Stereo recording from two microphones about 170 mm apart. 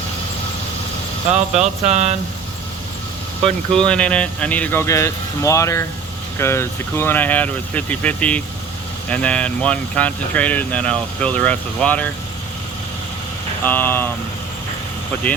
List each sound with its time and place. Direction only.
1.3 s speech: 40° right (ahead or behind)
3.4 s speech: 5° left (ahead or behind)
13.7 s speech: 10° left (ahead or behind)